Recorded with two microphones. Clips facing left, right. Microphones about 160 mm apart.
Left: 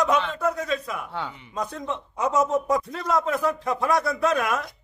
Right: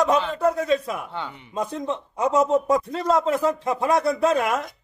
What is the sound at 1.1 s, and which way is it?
Speech, 5° left (ahead or behind).